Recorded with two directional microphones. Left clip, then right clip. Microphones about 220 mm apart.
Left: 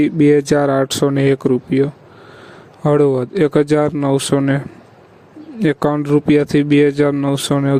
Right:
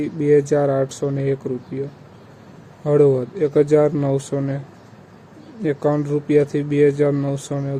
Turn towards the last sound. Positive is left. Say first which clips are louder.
# left 9 dB
turn(degrees=45)  # may be behind; listen again after turning